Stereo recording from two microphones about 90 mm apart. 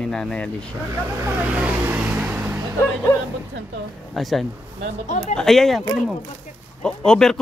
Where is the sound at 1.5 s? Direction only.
15° right (ahead or behind).